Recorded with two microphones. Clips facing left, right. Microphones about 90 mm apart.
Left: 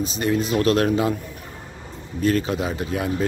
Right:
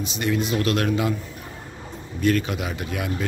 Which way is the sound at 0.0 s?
35° left (ahead or behind).